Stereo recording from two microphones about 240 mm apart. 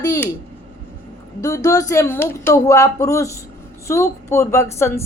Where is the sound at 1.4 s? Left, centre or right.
Centre.